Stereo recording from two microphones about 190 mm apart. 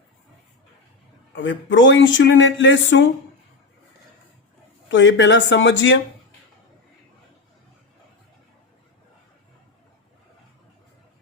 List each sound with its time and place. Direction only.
1.4 s speech: 70° left (ahead or behind)
4.9 s speech: 75° left (ahead or behind)